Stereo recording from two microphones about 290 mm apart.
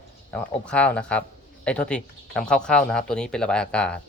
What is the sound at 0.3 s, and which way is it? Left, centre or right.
Speech, centre.